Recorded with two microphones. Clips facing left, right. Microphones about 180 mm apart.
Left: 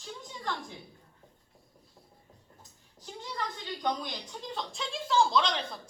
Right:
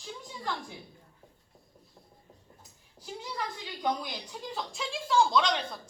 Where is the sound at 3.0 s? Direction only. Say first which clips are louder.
Right 1 dB; 5° right (ahead or behind).